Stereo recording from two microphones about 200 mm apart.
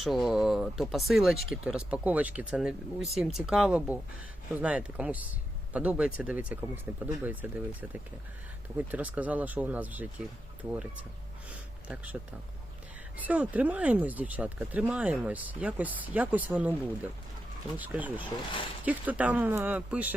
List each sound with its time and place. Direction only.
0.0 s speech: centre (ahead or behind)
8.9 s speech: 5° right (ahead or behind)
11.4 s a sound: 5° right (ahead or behind)
13.1 s speech: 5° right (ahead or behind)